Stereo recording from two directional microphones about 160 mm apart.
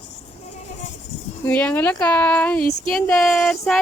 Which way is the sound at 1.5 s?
10° left (ahead or behind).